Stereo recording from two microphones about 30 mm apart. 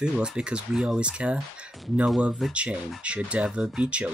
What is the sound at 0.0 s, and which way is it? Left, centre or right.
Speech, right.